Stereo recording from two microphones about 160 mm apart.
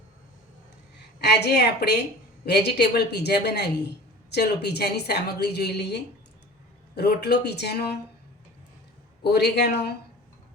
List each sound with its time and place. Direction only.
1.2 s speech: 90° left
9.2 s speech: 90° left